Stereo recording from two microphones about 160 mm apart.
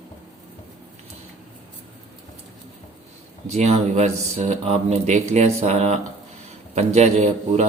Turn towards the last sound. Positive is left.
turn(degrees=-45)  # may be behind; listen again after turning